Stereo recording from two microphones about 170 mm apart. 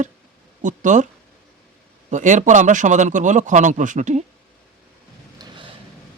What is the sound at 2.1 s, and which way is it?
A man's voice, 45° right (ahead or behind).